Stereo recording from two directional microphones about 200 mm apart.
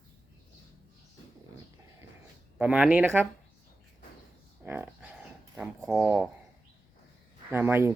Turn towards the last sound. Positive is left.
turn(degrees=-10)  # may be behind; listen again after turning